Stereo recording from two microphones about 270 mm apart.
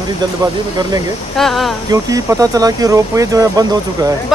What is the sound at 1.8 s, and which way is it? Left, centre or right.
Speech, centre.